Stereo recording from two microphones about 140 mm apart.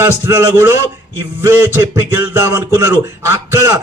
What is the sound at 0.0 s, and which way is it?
A man's voice, 15° right (ahead or behind).